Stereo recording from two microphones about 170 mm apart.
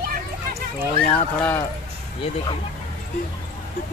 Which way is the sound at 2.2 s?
35° left (ahead or behind).